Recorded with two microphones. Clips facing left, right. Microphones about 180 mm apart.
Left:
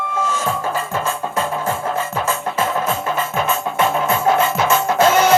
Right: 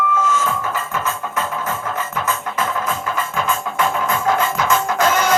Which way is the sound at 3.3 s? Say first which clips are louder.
Even; 25° left (ahead or behind).